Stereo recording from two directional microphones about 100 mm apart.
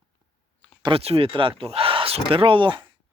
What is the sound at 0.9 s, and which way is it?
Speech, 70° right (ahead or behind).